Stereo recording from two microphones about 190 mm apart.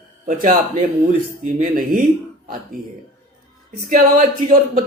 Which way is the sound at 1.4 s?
45° right (ahead or behind).